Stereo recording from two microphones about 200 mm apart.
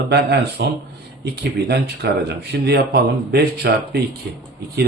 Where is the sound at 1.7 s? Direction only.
55° right (ahead or behind).